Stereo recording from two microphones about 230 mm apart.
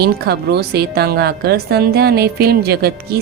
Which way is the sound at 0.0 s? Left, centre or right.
Right.